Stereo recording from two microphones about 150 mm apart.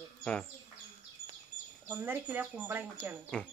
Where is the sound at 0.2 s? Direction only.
5° left (ahead or behind).